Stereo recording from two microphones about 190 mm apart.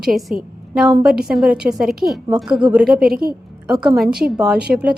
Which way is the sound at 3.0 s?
50° right (ahead or behind).